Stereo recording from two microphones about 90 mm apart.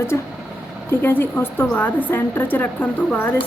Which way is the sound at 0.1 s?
35° left (ahead or behind).